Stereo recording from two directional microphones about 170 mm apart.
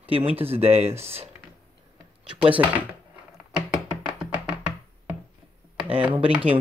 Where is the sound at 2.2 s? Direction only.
30° right (ahead or behind).